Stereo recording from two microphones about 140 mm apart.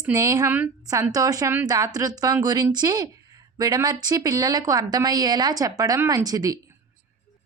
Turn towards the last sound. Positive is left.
turn(degrees=-25)  # may be behind; listen again after turning